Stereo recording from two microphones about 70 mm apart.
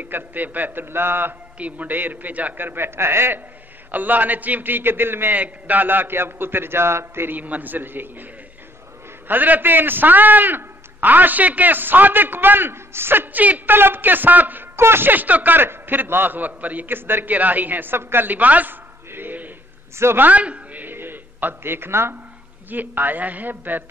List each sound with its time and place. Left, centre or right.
0.0 s a man's voice: right
9.3 s a man's voice: right
20.2 s a sound: centre; by 22.2 s right
22.7 s a man's voice: right